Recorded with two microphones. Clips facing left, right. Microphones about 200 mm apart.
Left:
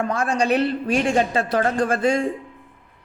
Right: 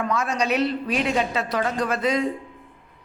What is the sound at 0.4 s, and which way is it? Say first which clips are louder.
A man's voice: left 3 dB; 55° left (ahead or behind).